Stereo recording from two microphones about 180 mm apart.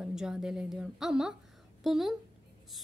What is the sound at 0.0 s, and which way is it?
A woman's voice, 5° right (ahead or behind).